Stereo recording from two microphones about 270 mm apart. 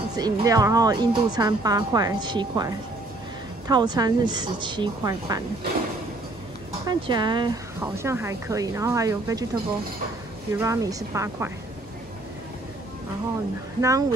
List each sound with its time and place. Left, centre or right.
0.1 s speech: centre
6.9 s speech: centre
10.5 s speech: centre
13.7 s speech: centre